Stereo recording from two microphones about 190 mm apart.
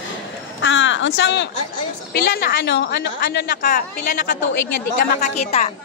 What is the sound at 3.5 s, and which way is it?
A woman's voice, 45° left (ahead or behind).